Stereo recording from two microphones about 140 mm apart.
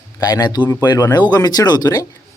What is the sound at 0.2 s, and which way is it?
Speech, 30° left (ahead or behind).